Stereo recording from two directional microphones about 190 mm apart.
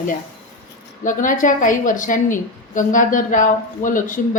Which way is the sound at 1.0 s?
45° left (ahead or behind).